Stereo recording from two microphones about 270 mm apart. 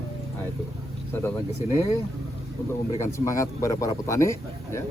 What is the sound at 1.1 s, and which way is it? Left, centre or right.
Speech, centre.